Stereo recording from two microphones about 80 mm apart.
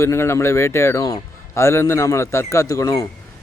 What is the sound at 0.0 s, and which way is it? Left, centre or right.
Speech, left.